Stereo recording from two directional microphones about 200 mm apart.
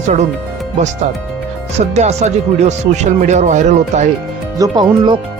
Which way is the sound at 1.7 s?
35° right (ahead or behind).